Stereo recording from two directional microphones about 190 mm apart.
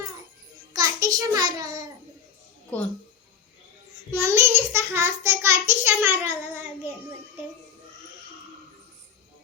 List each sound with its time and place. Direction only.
0.7 s a child's voice: 20° right (ahead or behind)
4.1 s a child's voice: 15° right (ahead or behind)